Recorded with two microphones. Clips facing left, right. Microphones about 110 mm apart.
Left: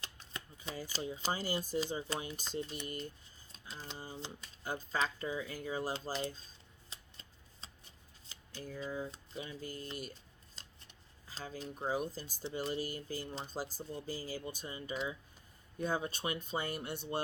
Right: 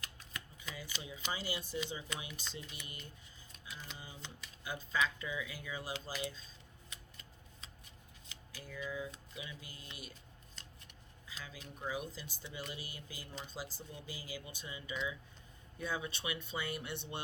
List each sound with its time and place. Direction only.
0.0 s speech: 30° left (ahead or behind)
2.8 s speech: 45° left (ahead or behind)
3.5 s speech: 30° left (ahead or behind)
6.9 s shuffling cards: 30° left (ahead or behind)
8.6 s speech: 40° left (ahead or behind)